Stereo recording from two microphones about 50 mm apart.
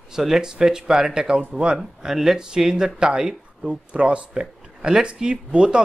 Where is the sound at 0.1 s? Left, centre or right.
Centre.